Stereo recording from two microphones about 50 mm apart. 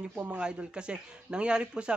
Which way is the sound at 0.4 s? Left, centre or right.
Centre.